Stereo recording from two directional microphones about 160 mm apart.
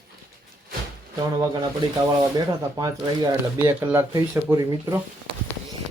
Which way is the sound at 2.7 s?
25° right (ahead or behind).